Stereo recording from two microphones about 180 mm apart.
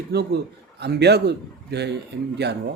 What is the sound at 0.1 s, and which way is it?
A man's voice, 60° right (ahead or behind).